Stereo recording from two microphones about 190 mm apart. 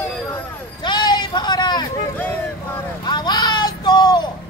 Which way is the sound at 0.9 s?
25° left (ahead or behind).